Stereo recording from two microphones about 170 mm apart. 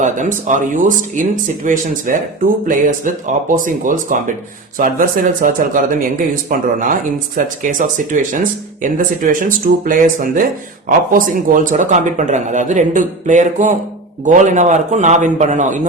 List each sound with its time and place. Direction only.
0.0 s speech: 50° right (ahead or behind)